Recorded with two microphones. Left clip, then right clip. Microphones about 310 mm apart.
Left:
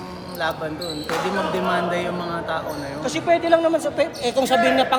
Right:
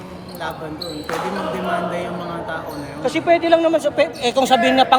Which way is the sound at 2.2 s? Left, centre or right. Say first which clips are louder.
Left 1 dB; left.